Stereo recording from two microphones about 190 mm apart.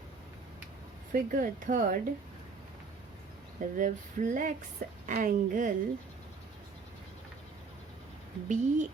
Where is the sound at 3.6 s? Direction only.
40° right (ahead or behind).